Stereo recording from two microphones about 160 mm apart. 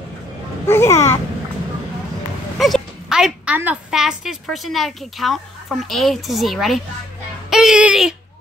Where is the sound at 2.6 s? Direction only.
Centre (ahead or behind).